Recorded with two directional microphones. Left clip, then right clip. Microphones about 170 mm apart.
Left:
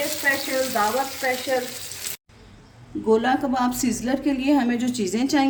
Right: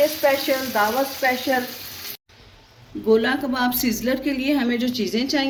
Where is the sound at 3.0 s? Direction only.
25° left (ahead or behind).